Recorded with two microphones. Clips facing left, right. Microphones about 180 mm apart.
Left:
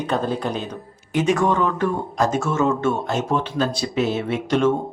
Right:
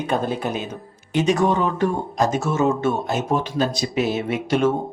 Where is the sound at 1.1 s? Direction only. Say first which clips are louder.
Even; 30° right (ahead or behind).